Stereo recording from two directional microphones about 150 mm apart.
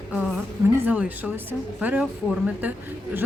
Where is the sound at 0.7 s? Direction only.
10° right (ahead or behind).